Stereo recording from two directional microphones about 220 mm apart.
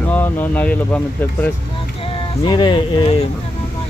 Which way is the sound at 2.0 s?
20° left (ahead or behind).